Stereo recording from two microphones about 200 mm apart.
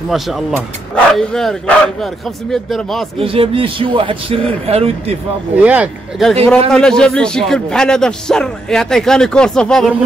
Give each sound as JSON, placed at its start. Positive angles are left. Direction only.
{"t": 0.1, "sound": "a man's voice", "side_deg": 0}
{"t": 3.2, "sound": "speech", "side_deg": -25}
{"t": 5.6, "sound": "a man's voice", "side_deg": -5}